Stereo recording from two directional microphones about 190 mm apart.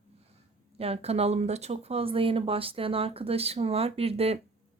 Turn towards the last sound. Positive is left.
turn(degrees=-30)  # may be behind; listen again after turning